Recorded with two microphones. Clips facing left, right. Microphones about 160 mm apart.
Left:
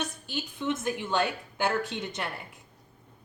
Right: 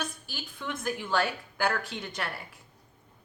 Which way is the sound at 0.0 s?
20° left (ahead or behind).